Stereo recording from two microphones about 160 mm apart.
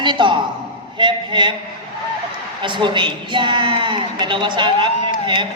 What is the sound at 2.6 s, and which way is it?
A man's voice, 30° right (ahead or behind).